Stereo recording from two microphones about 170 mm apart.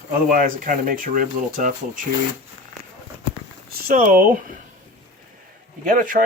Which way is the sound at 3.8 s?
55° right (ahead or behind).